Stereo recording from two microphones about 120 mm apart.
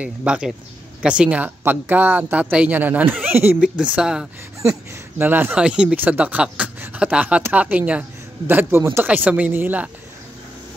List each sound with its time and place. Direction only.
0.0 s speech: 10° right (ahead or behind)
5.2 s speech: 15° right (ahead or behind)